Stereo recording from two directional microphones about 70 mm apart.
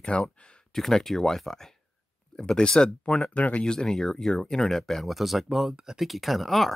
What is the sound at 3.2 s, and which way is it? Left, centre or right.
Speech, centre.